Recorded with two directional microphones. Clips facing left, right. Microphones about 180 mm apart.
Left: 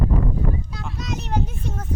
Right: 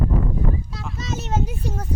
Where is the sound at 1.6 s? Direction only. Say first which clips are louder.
Right 2 dB; 35° right (ahead or behind).